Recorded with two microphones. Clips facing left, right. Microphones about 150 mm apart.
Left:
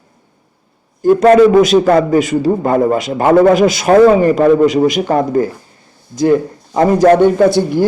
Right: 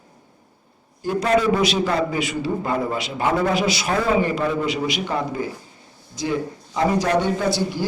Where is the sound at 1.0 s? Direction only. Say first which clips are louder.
Left 12 dB; 50° left (ahead or behind).